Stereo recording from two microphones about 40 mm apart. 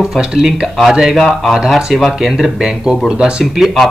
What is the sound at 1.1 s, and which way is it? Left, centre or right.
Speech, centre.